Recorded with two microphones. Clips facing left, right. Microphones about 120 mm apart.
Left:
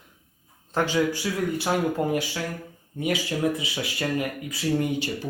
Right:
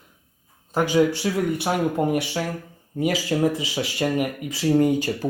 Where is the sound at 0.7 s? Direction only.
15° right (ahead or behind).